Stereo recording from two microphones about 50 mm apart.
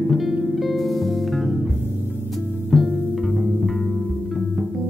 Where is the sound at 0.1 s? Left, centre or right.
Centre.